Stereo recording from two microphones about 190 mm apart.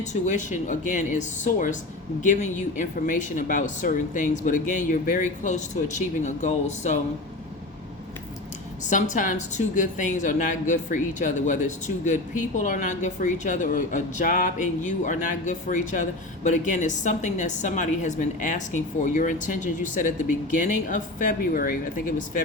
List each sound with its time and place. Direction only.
0.0 s a woman's voice: 40° left (ahead or behind)
8.9 s a woman's voice: 40° left (ahead or behind)